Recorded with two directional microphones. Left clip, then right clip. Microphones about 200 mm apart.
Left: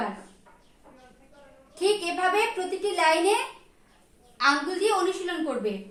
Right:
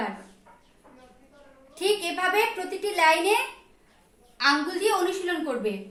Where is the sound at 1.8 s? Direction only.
10° left (ahead or behind).